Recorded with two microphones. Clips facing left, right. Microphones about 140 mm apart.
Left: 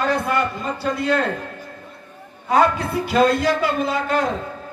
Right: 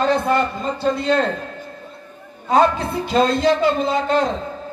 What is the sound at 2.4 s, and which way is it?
A man's voice, 25° right (ahead or behind).